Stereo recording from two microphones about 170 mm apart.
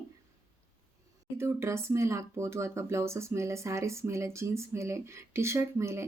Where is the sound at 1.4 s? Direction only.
15° right (ahead or behind).